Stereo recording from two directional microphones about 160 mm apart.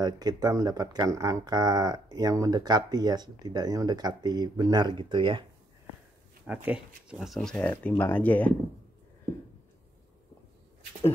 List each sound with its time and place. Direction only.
0.0 s speech: 25° right (ahead or behind)
6.4 s speech: 10° right (ahead or behind); by 8.5 s 10° left (ahead or behind)